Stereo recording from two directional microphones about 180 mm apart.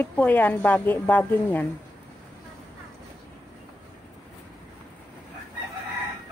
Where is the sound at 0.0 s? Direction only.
10° left (ahead or behind).